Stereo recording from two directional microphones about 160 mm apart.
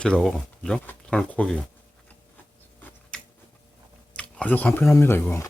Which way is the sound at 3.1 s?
5° left (ahead or behind).